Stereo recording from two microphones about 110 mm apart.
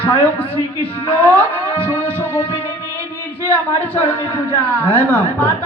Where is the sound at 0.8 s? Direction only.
20° left (ahead or behind).